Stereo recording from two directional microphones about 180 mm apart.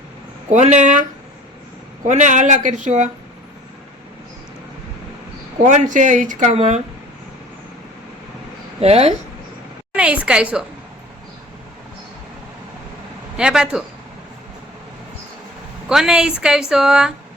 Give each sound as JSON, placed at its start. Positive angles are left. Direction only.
{"t": 0.5, "sound": "speech", "side_deg": -40}
{"t": 2.0, "sound": "speech", "side_deg": -40}
{"t": 5.6, "sound": "speech", "side_deg": -45}
{"t": 8.8, "sound": "speech", "side_deg": -35}
{"t": 9.9, "sound": "a woman's voice", "side_deg": -5}
{"t": 13.3, "sound": "a woman's voice", "side_deg": -5}
{"t": 15.9, "sound": "a woman's voice", "side_deg": -5}